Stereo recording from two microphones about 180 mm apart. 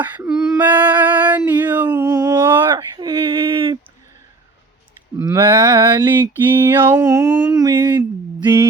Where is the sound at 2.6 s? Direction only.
25° right (ahead or behind).